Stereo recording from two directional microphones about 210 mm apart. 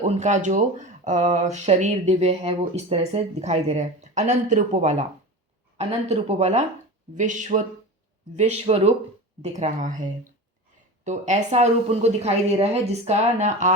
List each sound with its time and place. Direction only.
0.0 s speech: 35° right (ahead or behind)